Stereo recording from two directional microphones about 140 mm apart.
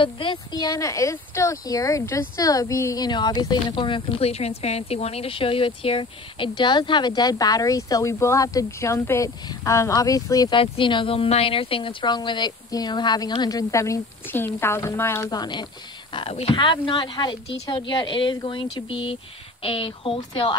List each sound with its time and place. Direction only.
0.0 s speech: 35° left (ahead or behind)
10.6 s a woman's voice: 35° left (ahead or behind); by 15.3 s 15° left (ahead or behind)
15.3 s a woman's voice: 30° left (ahead or behind)